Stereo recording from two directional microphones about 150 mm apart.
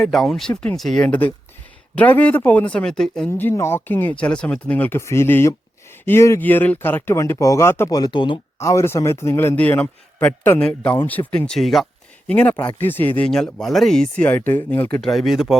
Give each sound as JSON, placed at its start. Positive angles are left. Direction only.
{"t": 0.0, "sound": "a man's voice", "side_deg": 0}
{"t": 3.2, "sound": "a man's voice", "side_deg": 15}
{"t": 8.5, "sound": "a man's voice", "side_deg": 20}
{"t": 15.0, "sound": "speech", "side_deg": 0}